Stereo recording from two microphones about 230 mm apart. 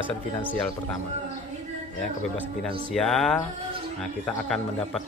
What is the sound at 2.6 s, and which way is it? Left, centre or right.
Speech, centre.